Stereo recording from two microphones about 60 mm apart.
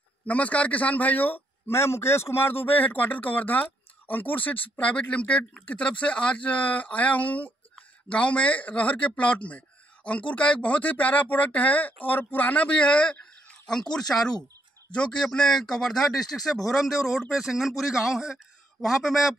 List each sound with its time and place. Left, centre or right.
0.3 s speech: left
1.7 s speech: left; by 19.3 s centre